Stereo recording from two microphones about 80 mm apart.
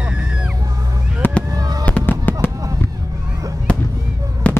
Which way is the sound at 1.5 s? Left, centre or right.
Right.